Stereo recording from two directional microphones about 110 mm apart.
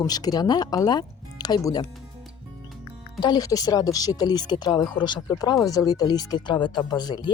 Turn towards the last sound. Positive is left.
turn(degrees=40)  # may be behind; listen again after turning